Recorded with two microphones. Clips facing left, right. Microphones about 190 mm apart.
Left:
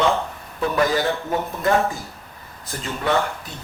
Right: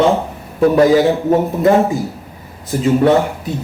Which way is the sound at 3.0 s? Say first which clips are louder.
Right 5 dB; 25° right (ahead or behind).